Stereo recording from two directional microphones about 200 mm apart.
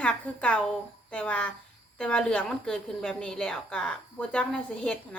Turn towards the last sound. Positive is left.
turn(degrees=5)  # may be behind; listen again after turning